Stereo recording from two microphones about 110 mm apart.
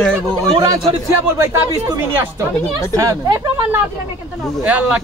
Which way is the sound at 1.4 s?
20° right (ahead or behind).